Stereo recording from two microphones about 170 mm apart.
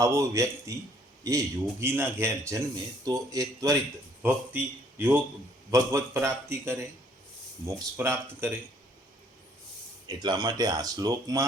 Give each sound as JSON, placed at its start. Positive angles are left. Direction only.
{"t": 0.0, "sound": "a man's voice", "side_deg": -15}
{"t": 10.1, "sound": "speech", "side_deg": -25}